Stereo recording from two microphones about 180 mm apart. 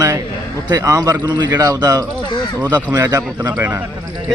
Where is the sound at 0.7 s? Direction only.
20° right (ahead or behind).